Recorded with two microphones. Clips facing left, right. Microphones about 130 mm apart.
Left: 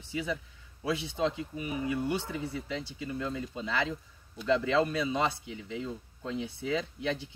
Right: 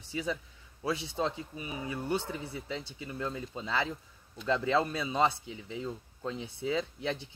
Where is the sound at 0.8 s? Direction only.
35° right (ahead or behind).